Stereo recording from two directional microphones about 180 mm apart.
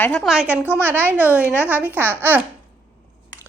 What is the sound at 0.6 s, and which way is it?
Speech, 10° left (ahead or behind).